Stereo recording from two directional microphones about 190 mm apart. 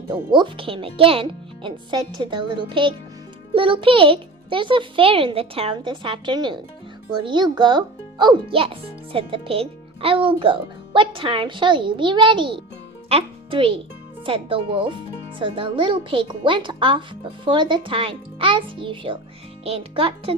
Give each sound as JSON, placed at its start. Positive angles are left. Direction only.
{"t": 0.1, "sound": "a child's voice", "side_deg": -25}